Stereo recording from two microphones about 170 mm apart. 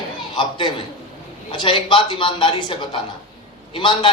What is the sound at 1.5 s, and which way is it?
A woman's voice, 30° left (ahead or behind).